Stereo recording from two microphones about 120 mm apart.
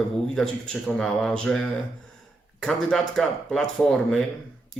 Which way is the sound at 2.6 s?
5° left (ahead or behind).